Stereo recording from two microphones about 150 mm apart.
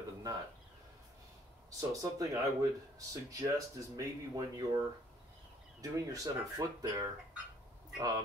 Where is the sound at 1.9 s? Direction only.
25° right (ahead or behind).